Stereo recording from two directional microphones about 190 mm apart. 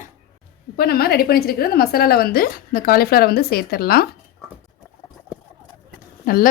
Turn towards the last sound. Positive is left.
turn(degrees=50)  # may be behind; listen again after turning